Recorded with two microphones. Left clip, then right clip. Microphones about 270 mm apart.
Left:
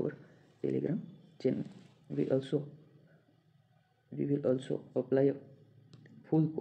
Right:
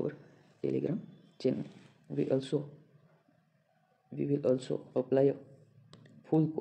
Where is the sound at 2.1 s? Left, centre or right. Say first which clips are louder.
Right 1 dB; right.